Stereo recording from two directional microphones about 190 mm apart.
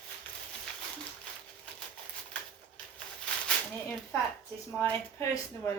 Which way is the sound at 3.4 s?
10° left (ahead or behind).